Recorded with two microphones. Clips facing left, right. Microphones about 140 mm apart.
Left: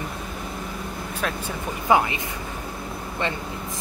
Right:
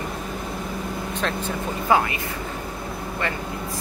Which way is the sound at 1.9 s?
20° left (ahead or behind).